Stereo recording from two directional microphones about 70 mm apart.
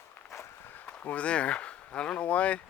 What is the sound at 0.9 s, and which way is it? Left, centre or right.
Speech, left.